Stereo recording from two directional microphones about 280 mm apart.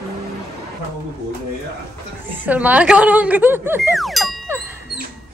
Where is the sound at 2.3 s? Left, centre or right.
Centre.